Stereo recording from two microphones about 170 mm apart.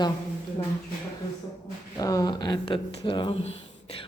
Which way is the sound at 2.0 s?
20° left (ahead or behind).